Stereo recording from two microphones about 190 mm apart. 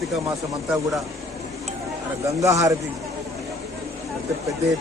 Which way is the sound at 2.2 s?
15° right (ahead or behind).